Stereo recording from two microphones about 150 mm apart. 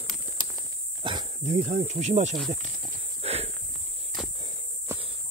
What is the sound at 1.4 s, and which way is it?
Speech, 50° right (ahead or behind).